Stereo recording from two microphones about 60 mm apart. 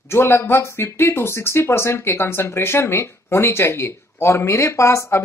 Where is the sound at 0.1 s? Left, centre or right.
Left.